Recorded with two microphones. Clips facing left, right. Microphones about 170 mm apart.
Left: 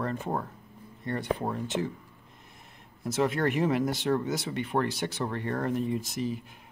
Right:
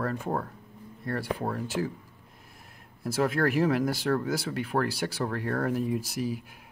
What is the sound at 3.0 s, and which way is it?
Speech, centre (ahead or behind).